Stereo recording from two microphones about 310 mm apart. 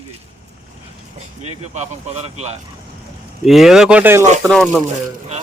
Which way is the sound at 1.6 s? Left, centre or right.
Right.